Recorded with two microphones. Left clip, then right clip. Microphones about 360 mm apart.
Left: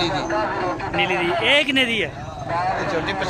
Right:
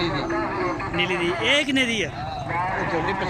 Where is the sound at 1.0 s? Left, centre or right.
Left.